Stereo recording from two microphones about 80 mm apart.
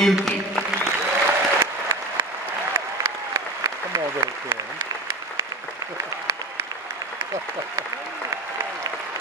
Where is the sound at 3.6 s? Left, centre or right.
Right.